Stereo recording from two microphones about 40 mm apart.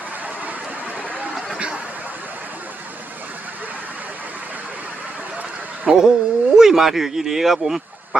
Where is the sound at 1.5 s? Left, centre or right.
Right.